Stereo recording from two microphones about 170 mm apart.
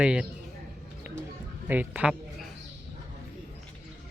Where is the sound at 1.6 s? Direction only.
10° right (ahead or behind).